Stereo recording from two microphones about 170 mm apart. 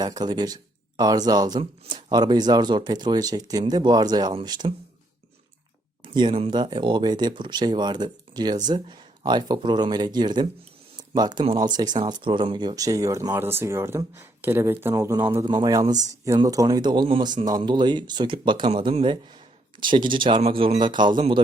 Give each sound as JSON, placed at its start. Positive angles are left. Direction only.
{"t": 0.0, "sound": "speech", "side_deg": -25}
{"t": 6.0, "sound": "speech", "side_deg": -25}